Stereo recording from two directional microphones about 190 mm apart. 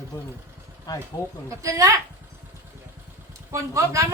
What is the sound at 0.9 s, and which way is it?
Speech, 20° left (ahead or behind).